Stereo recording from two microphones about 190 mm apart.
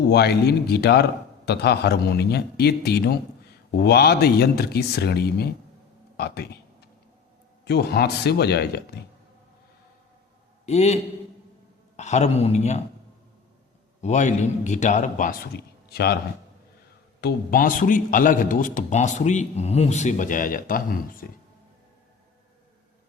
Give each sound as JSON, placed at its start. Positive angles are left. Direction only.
{"t": 0.1, "sound": "a man's voice", "side_deg": 60}
{"t": 7.6, "sound": "a man's voice", "side_deg": 60}
{"t": 10.7, "sound": "a man's voice", "side_deg": 35}
{"t": 14.0, "sound": "a man's voice", "side_deg": 40}
{"t": 15.5, "sound": "a sound", "side_deg": 55}
{"t": 17.2, "sound": "a man's voice", "side_deg": 55}